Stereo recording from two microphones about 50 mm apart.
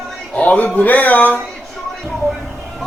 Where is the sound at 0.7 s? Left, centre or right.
Left.